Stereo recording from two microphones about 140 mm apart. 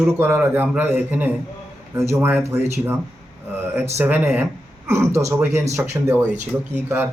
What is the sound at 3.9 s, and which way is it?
A man's voice, 15° right (ahead or behind).